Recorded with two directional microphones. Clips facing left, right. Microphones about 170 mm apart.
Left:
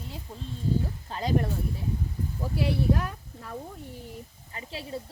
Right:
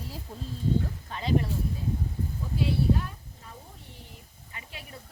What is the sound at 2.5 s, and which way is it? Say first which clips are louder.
Speech: even; 80° left.